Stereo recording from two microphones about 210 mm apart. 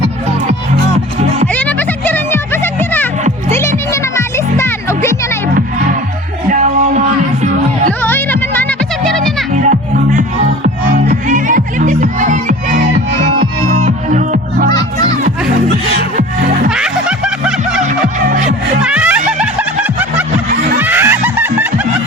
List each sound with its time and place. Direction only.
1.5 s music: 10° left (ahead or behind)
6.5 s music: 35° right (ahead or behind)
8.0 s music: 10° left (ahead or behind)
9.6 s music: 40° right (ahead or behind)
15.7 s music: 45° right (ahead or behind)
16.6 s music: 5° right (ahead or behind)
18.0 s music: 35° right (ahead or behind)
18.8 s music: 5° right (ahead or behind)
20.7 s snicker: 10° right (ahead or behind)